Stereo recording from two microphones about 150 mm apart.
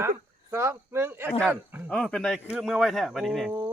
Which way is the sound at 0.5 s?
20° right (ahead or behind).